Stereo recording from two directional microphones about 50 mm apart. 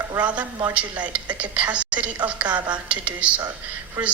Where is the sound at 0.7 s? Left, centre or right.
Right.